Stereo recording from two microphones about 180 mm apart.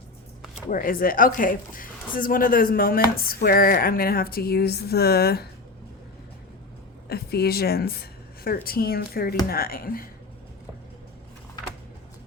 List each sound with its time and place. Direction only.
0.7 s a woman's voice: 50° left (ahead or behind)
7.1 s a woman's voice: 60° left (ahead or behind)